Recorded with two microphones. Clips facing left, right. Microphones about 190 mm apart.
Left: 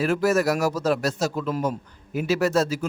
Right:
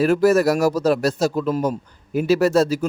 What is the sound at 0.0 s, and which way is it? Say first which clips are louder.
Speech: right 5 dB; 40° right (ahead or behind).